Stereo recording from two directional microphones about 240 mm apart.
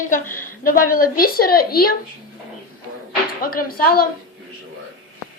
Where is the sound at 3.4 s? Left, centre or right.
Left.